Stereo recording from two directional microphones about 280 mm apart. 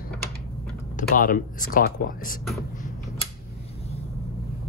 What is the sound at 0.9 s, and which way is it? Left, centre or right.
Speech, left.